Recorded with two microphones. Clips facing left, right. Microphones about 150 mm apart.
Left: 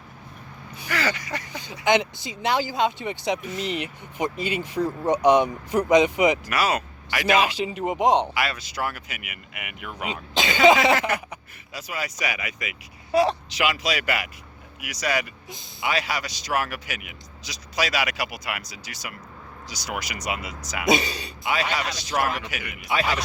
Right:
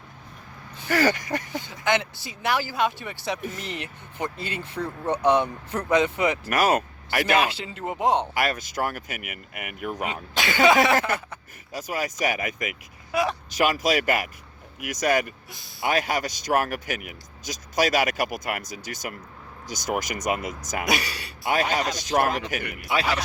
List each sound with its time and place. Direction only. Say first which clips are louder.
0.9 s a man's voice: right 5 dB; 45° right (ahead or behind)
1.5 s speech: left 5 dB; 15° left (ahead or behind)
6.5 s speech: right 3 dB; 45° right (ahead or behind)
7.3 s speech: left 2 dB; 15° left (ahead or behind)
8.3 s a man's voice: right 2 dB; 45° right (ahead or behind)
10.3 s speech: left 2 dB; 20° left (ahead or behind)
11.7 s a man's voice: right 3 dB; 45° right (ahead or behind)
13.1 s speech: left 5 dB; 30° left (ahead or behind)
13.5 s a man's voice: right 3 dB; 45° right (ahead or behind)
15.4 s speech: left 4 dB; 20° left (ahead or behind)
15.8 s a man's voice: right 3 dB; 50° right (ahead or behind)
20.8 s speech: left 7 dB; 20° left (ahead or behind)
21.4 s a man's voice: right 2 dB; 45° right (ahead or behind)